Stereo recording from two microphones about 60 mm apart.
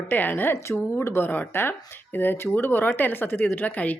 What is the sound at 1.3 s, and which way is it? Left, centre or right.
Speech, left.